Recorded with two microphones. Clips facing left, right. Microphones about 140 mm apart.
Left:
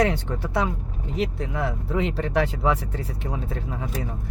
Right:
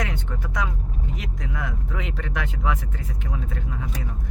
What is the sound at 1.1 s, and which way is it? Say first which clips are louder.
Speech: left 11 dB; 30° left (ahead or behind).